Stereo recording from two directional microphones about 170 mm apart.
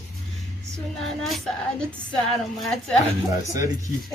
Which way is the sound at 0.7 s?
Centre (ahead or behind).